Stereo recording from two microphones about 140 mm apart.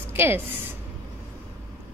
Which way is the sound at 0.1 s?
15° right (ahead or behind).